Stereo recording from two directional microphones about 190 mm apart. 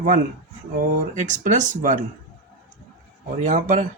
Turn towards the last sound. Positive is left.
turn(degrees=-45)  # may be behind; listen again after turning